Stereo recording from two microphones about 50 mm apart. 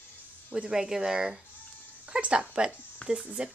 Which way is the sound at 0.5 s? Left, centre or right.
Right.